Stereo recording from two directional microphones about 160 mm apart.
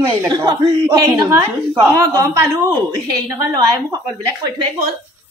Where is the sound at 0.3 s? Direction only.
30° right (ahead or behind).